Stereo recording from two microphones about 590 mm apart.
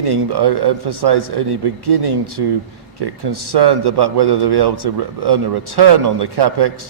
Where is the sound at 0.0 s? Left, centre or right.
Right.